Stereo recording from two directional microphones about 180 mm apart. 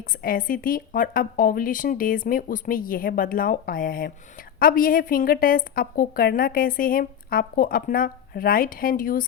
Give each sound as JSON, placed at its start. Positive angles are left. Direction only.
{"t": 0.1, "sound": "a woman's voice", "side_deg": 50}